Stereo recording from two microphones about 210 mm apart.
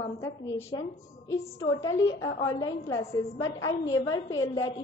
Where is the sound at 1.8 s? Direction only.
15° left (ahead or behind).